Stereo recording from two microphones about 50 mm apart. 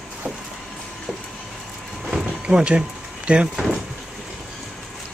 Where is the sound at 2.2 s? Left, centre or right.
Centre.